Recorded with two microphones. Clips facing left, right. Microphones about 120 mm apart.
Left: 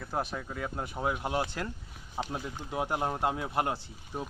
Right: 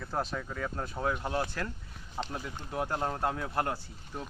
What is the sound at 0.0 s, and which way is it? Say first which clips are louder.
Speech: even; 15° left (ahead or behind).